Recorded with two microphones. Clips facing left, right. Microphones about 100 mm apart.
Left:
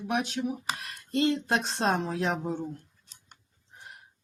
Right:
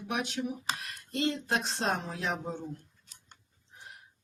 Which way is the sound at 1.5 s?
55° left (ahead or behind).